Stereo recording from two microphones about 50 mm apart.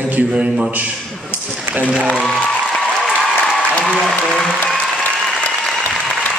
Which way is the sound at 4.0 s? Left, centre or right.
Centre.